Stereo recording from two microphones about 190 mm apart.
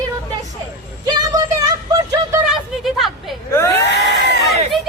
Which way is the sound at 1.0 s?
20° right (ahead or behind).